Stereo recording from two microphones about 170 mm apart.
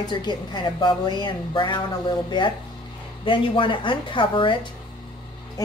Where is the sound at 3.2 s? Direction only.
30° left (ahead or behind).